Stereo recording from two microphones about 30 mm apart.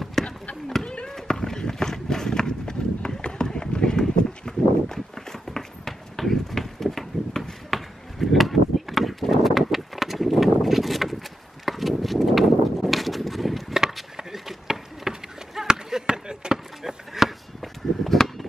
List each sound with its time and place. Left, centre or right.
0.2 s a sound: centre
1.6 s run: centre
3.7 s clip-clop: left
4.0 s walk: centre
11.6 s a sound: centre
14.5 s a sound: centre
15.6 s basketball bounce: right
16.8 s chop: centre
18.1 s chop: centre